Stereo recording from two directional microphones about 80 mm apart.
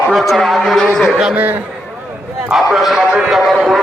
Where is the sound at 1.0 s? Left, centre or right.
Centre.